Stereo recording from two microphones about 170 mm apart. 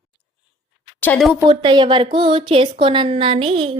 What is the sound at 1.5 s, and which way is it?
A woman's voice, 25° right (ahead or behind).